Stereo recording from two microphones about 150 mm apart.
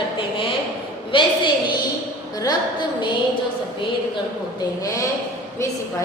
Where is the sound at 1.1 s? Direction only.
35° left (ahead or behind).